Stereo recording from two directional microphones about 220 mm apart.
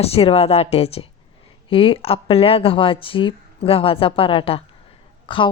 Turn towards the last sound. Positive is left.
turn(degrees=20)  # may be behind; listen again after turning